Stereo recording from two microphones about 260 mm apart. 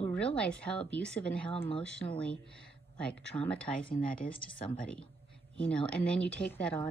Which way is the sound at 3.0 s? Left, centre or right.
Centre.